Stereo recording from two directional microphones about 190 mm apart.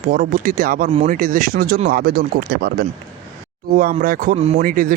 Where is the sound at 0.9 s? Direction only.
30° right (ahead or behind).